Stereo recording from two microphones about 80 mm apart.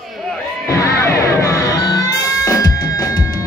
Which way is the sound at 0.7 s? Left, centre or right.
Left.